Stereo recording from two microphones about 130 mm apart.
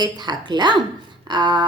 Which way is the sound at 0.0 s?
35° right (ahead or behind).